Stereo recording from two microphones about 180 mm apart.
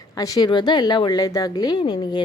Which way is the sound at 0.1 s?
20° left (ahead or behind).